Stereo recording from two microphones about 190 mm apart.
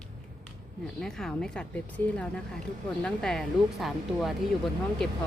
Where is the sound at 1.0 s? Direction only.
5° left (ahead or behind).